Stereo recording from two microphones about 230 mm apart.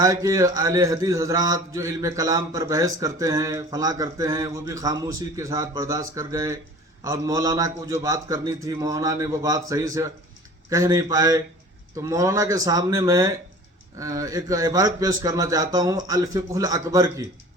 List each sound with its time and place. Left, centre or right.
0.0 s speech: centre